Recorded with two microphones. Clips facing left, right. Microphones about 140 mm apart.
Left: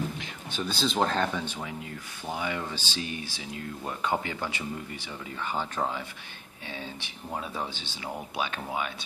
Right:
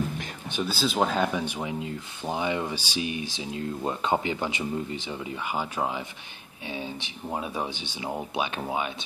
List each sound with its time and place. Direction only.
0.7 s speech: 5° right (ahead or behind); by 8.9 s 20° right (ahead or behind)